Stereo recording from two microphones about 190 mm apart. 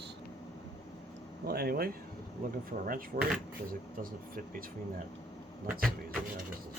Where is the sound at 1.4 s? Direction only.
55° right (ahead or behind).